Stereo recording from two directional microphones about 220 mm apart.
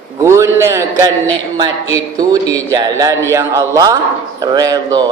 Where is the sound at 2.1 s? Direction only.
15° right (ahead or behind).